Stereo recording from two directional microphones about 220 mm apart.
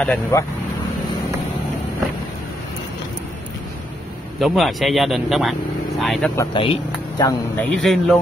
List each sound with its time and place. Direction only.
0.0 s speech: 10° left (ahead or behind)
4.4 s speech: centre (ahead or behind)
6.3 s speech: 20° left (ahead or behind)
7.7 s speech: centre (ahead or behind)